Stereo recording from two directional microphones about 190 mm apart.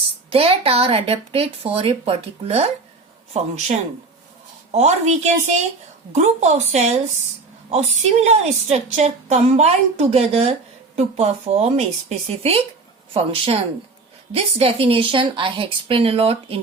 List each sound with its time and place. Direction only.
0.3 s a woman's voice: 30° right (ahead or behind)